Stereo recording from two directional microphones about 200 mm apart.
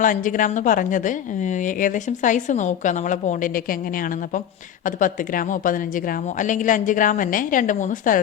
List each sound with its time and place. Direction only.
0.0 s a woman's voice: 40° left (ahead or behind)